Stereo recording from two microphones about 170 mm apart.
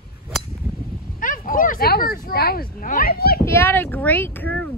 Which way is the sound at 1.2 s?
55° left (ahead or behind).